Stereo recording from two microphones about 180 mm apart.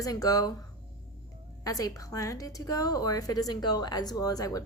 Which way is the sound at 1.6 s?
20° left (ahead or behind).